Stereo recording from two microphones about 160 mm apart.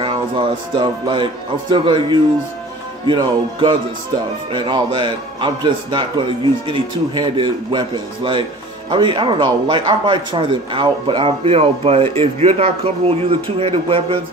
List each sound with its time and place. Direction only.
0.0 s a man's voice: 30° right (ahead or behind)